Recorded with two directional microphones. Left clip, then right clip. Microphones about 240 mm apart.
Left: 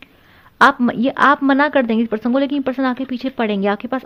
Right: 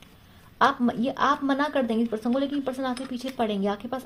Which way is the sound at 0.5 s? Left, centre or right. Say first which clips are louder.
Left 9 dB; left.